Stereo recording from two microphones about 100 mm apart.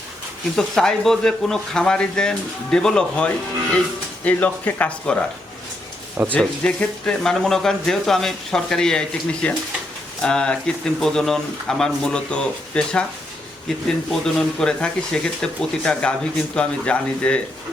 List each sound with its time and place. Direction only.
0.5 s speech: 5° left (ahead or behind)
6.2 s speech: 15° right (ahead or behind)
6.6 s speech: 10° left (ahead or behind)